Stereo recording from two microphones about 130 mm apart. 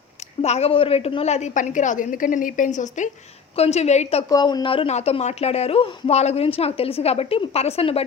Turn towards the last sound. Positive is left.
turn(degrees=50)  # may be behind; listen again after turning